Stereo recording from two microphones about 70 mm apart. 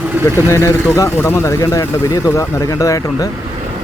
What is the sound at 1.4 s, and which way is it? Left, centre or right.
Speech, left.